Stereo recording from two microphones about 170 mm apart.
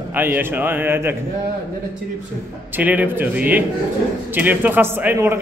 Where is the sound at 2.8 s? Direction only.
10° right (ahead or behind).